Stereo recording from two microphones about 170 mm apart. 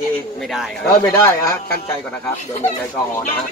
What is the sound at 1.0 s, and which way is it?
Speech, 15° left (ahead or behind).